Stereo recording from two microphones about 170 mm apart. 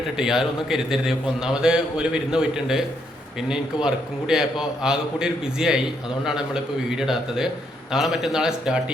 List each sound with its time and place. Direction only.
0.2 s a man's voice: 5° right (ahead or behind)